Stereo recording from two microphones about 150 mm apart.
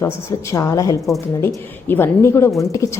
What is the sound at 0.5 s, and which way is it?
A woman's voice, 20° left (ahead or behind).